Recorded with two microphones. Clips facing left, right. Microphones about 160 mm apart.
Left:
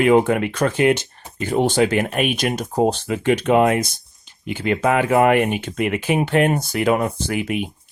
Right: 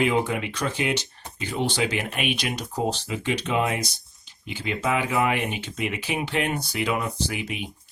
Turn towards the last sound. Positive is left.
turn(degrees=55)  # may be behind; listen again after turning